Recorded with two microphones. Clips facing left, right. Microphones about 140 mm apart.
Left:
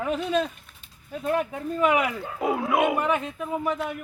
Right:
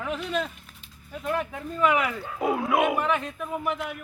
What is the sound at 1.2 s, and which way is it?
Speech, 30° left (ahead or behind).